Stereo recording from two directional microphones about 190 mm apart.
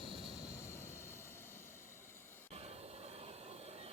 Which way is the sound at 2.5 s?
35° right (ahead or behind).